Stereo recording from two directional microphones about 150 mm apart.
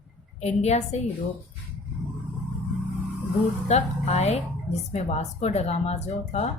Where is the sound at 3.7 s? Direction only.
50° left (ahead or behind).